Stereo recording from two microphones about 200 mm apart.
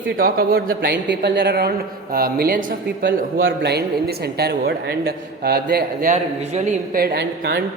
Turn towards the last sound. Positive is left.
turn(degrees=-50)  # may be behind; listen again after turning